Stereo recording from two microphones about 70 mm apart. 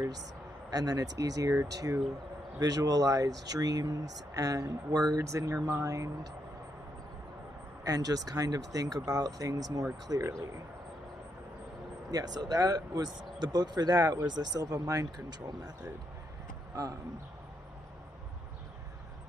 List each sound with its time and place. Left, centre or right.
0.7 s speech: right
7.8 s speech: right
10.2 s speech: right
12.1 s speech: right